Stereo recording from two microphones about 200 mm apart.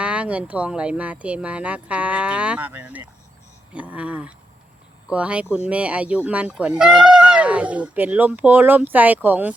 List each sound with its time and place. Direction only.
0.0 s speech: 5° right (ahead or behind)